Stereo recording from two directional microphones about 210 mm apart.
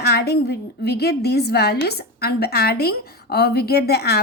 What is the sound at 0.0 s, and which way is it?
A woman's voice, 50° left (ahead or behind).